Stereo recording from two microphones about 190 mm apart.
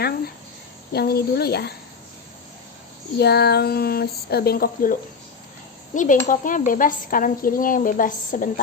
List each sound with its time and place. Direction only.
0.9 s speech: 55° left (ahead or behind)
3.2 s speech: 55° left (ahead or behind)